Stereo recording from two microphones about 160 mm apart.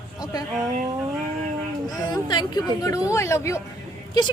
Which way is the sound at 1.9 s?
25° left (ahead or behind).